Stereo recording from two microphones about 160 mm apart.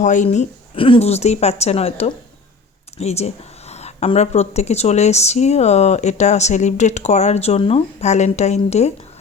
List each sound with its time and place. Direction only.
0.0 s a woman's voice: 50° left (ahead or behind)